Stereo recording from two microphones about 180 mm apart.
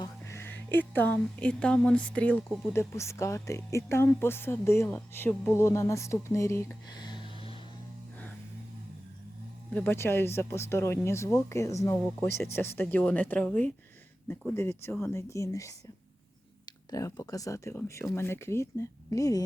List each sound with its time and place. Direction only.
0.0 s speech: 15° left (ahead or behind)
9.7 s speech: 10° left (ahead or behind)